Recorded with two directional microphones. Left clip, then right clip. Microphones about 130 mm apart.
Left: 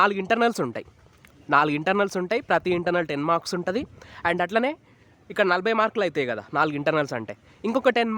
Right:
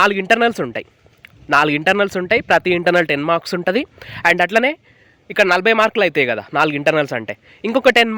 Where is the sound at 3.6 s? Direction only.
35° right (ahead or behind).